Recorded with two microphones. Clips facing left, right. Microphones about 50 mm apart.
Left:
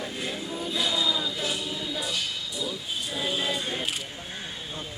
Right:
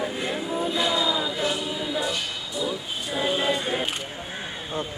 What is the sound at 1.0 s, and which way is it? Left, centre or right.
Music, right.